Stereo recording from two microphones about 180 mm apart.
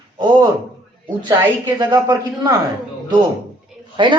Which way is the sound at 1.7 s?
20° right (ahead or behind).